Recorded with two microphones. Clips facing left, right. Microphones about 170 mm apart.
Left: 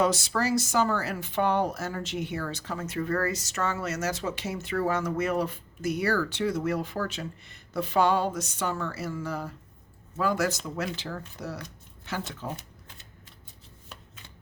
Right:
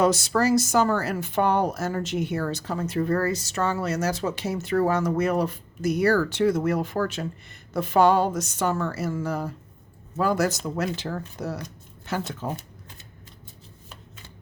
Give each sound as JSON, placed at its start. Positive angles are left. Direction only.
{"t": 0.0, "sound": "speech", "side_deg": -45}